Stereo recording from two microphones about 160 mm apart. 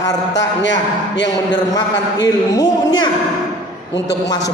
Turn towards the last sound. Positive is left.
turn(degrees=25)  # may be behind; listen again after turning